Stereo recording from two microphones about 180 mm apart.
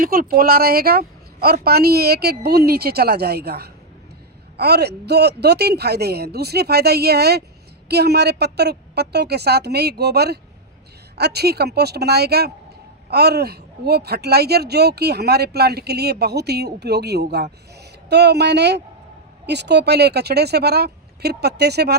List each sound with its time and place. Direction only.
0.0 s speech: 55° right (ahead or behind)